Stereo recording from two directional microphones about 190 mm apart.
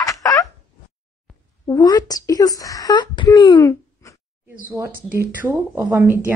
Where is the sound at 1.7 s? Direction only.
20° left (ahead or behind).